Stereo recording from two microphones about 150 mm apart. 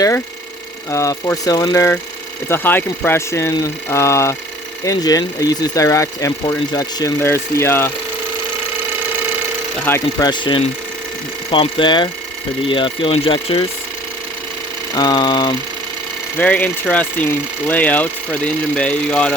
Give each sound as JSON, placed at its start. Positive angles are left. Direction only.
{"t": 0.9, "sound": "speech", "side_deg": 20}
{"t": 9.8, "sound": "speech", "side_deg": 15}
{"t": 10.2, "sound": "speech", "side_deg": 30}
{"t": 14.9, "sound": "speech", "side_deg": 25}
{"t": 16.4, "sound": "speech", "side_deg": 10}